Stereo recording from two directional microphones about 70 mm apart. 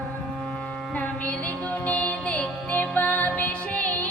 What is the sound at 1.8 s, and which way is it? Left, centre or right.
Music, left.